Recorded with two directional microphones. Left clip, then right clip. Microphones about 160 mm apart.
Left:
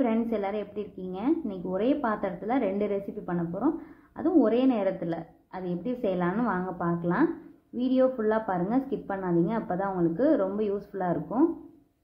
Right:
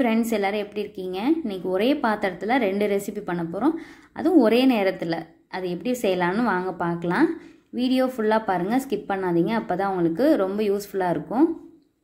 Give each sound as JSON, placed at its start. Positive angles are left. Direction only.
{"t": 0.0, "sound": "a woman's voice", "side_deg": -25}